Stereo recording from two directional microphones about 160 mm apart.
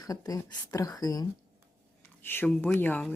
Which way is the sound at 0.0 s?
25° left (ahead or behind).